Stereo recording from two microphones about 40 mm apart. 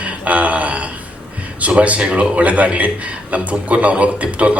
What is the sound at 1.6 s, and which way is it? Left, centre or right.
A man's voice, right.